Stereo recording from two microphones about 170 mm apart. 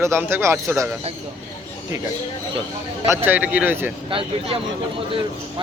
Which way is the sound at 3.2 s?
10° right (ahead or behind).